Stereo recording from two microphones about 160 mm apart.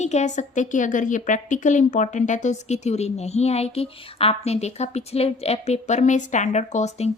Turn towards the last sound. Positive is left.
turn(degrees=45)  # may be behind; listen again after turning